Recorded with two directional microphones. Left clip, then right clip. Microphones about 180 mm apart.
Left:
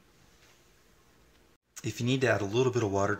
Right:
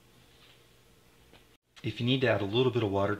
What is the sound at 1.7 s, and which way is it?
Speech, 10° left (ahead or behind).